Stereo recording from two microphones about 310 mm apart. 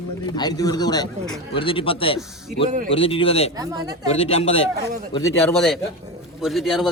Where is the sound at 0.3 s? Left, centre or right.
Centre.